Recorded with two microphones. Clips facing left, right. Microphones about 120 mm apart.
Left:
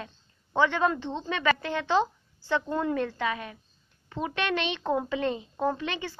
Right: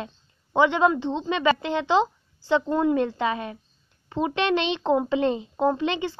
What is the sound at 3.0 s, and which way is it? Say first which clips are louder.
A woman's voice: right 5 dB; 25° right (ahead or behind).